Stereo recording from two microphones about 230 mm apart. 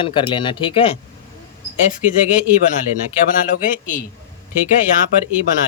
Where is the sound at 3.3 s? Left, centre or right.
Left.